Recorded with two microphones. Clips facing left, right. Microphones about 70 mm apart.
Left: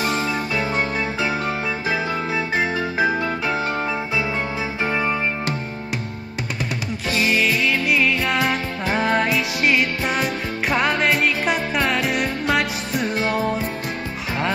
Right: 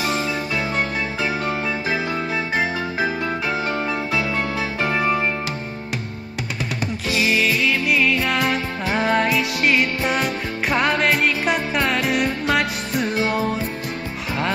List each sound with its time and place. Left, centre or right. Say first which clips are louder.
4.9 s music: right 3 dB; centre
7.1 s music: even; left
7.4 s music: even; centre